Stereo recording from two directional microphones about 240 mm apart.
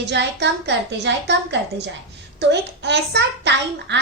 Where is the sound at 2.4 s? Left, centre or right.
Right.